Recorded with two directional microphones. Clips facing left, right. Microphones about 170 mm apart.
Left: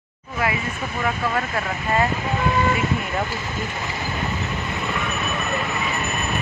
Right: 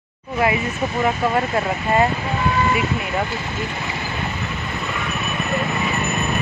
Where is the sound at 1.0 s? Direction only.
25° right (ahead or behind).